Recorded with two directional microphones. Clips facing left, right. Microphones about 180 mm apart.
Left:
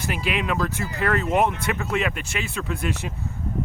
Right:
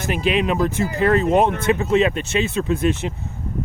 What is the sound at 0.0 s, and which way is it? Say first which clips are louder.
Speech: right 6 dB; 20° right (ahead or behind).